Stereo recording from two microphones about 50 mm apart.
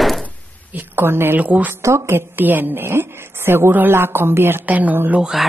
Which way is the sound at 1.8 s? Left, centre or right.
Right.